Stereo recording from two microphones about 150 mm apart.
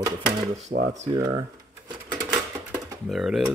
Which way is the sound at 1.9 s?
30° right (ahead or behind).